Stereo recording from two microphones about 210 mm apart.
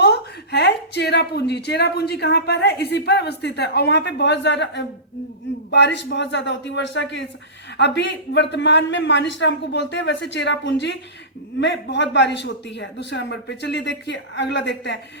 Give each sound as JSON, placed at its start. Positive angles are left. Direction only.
{"t": 0.0, "sound": "a woman's voice", "side_deg": 55}